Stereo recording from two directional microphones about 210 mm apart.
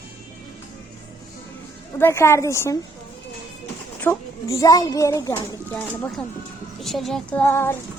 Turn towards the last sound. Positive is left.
turn(degrees=10)  # may be behind; listen again after turning